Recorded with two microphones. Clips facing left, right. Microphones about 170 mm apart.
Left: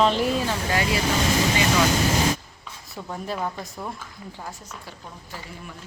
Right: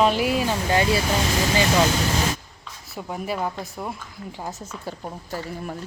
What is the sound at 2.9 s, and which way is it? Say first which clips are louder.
Speech: right 2 dB; 15° right (ahead or behind).